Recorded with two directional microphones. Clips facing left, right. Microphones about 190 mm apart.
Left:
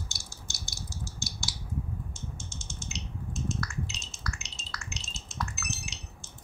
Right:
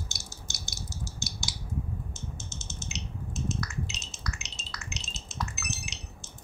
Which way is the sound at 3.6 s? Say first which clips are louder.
Even; 20° right (ahead or behind).